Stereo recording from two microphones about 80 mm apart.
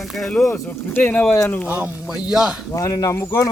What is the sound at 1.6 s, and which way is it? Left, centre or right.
Speech, right.